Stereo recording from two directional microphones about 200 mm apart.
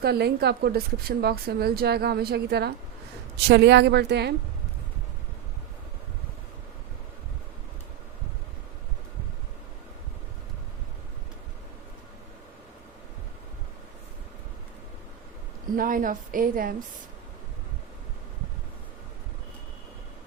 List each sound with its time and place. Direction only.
0.0 s a woman's voice: 55° right (ahead or behind)
15.7 s a woman's voice: 45° right (ahead or behind)